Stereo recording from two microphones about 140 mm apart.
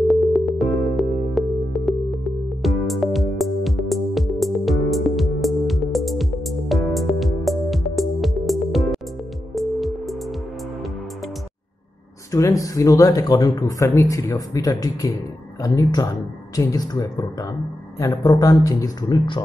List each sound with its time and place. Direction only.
0.1 s music: centre (ahead or behind)
12.3 s speech: 20° left (ahead or behind)